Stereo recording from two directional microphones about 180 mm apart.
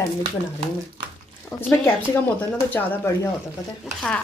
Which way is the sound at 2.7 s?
10° left (ahead or behind).